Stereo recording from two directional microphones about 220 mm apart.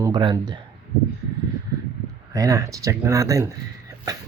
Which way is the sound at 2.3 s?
15° right (ahead or behind).